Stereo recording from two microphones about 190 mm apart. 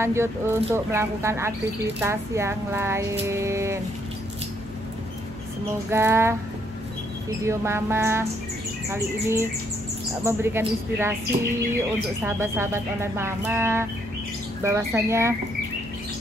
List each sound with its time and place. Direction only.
0.0 s speech: 15° right (ahead or behind)
5.9 s speech: 15° right (ahead or behind)
7.4 s speech: 15° right (ahead or behind)
12.2 s speech: 10° right (ahead or behind)